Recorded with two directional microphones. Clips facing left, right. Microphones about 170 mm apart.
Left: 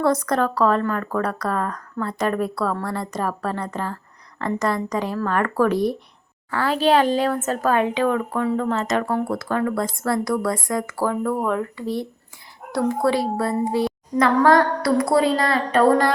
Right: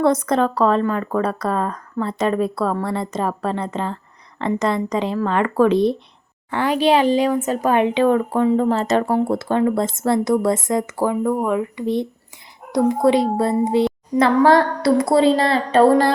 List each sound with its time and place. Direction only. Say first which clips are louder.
0.0 s speech: right 3 dB; 20° right (ahead or behind)